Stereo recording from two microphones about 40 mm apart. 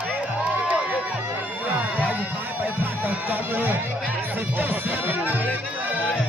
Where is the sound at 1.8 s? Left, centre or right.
Right.